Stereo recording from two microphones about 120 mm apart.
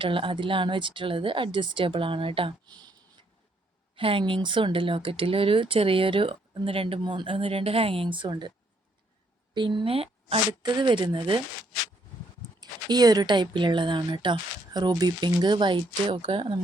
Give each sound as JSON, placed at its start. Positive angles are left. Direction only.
{"t": 0.0, "sound": "speech", "side_deg": -45}
{"t": 3.9, "sound": "speech", "side_deg": -45}
{"t": 9.6, "sound": "a woman's voice", "side_deg": -40}
{"t": 12.5, "sound": "a woman's voice", "side_deg": -35}